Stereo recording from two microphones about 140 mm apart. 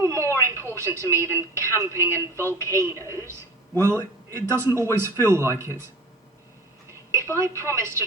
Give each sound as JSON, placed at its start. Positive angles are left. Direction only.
{"t": 0.0, "sound": "television", "side_deg": -20}
{"t": 0.7, "sound": "a man's voice", "side_deg": -20}
{"t": 7.3, "sound": "a man's voice", "side_deg": -20}